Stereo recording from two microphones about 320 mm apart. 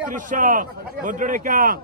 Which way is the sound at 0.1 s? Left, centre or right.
Right.